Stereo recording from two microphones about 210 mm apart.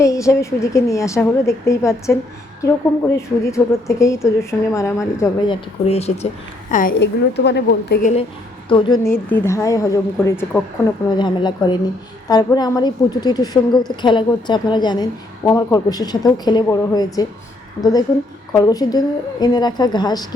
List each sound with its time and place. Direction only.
0.0 s a woman's voice: 15° left (ahead or behind); by 6.1 s 30° left (ahead or behind)
6.7 s a woman's voice: 40° left (ahead or behind)
8.7 s a woman's voice: 25° left (ahead or behind)
9.0 s a woman's voice: 10° left (ahead or behind)